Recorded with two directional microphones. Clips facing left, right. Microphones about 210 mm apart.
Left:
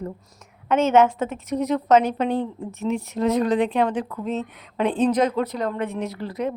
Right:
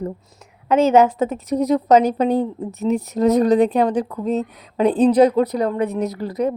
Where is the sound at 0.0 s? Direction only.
35° right (ahead or behind).